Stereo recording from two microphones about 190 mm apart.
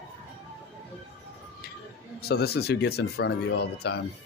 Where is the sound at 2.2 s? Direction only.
55° left (ahead or behind).